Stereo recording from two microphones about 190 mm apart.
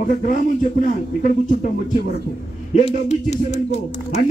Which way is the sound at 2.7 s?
35° left (ahead or behind).